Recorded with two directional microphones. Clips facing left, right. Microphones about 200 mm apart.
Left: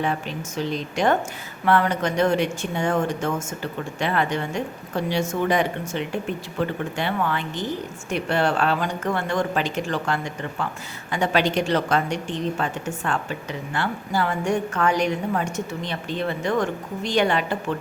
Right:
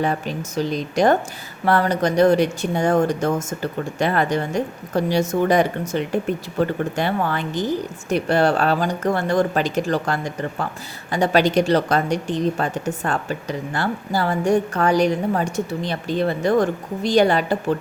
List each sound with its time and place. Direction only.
0.0 s speech: 40° right (ahead or behind)